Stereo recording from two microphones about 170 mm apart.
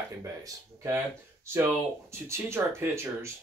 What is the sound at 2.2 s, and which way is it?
Speech, 15° right (ahead or behind).